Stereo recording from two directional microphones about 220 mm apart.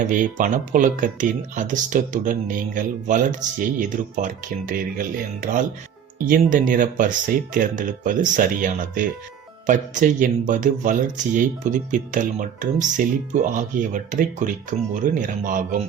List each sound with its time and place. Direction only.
0.0 s speech: 35° right (ahead or behind)